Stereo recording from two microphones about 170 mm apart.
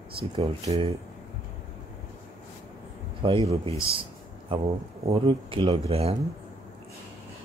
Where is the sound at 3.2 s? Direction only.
30° right (ahead or behind).